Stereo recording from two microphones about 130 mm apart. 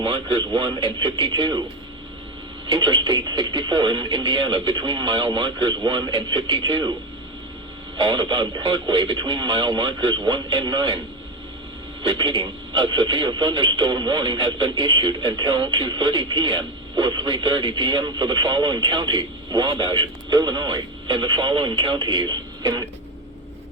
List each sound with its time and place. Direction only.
0.0 s speech: 40° right (ahead or behind)
2.6 s speech: 40° right (ahead or behind)
7.9 s speech: 40° right (ahead or behind)
12.0 s speech: 35° right (ahead or behind)